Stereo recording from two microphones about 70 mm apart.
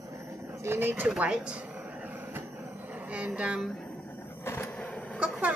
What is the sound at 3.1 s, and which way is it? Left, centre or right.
Speech, right.